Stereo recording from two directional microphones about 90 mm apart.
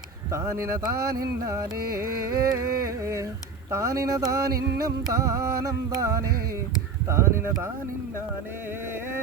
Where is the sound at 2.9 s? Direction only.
30° right (ahead or behind).